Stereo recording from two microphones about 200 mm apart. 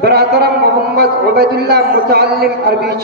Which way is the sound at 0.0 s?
55° right (ahead or behind).